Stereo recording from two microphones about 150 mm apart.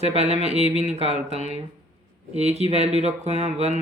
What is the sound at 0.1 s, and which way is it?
Speech, 45° right (ahead or behind).